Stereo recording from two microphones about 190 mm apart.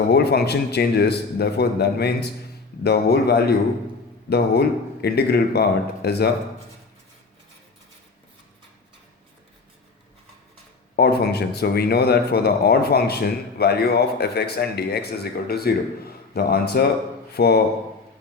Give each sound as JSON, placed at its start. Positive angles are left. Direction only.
{"t": 0.1, "sound": "speech", "side_deg": 60}
{"t": 10.9, "sound": "speech", "side_deg": 55}